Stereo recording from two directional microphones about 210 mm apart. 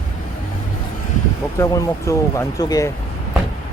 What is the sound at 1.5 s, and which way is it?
Speech, 15° left (ahead or behind).